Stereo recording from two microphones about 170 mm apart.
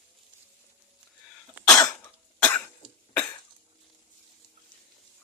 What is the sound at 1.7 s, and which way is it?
Cough, 20° left (ahead or behind).